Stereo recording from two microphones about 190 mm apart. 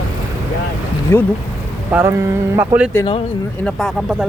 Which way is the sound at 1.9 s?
15° right (ahead or behind).